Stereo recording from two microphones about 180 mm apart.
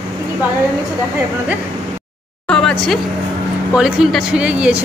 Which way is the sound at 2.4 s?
5° left (ahead or behind).